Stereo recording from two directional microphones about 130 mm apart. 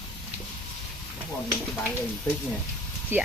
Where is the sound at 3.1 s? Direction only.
15° right (ahead or behind).